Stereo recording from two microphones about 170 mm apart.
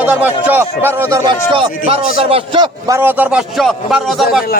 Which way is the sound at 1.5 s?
35° right (ahead or behind).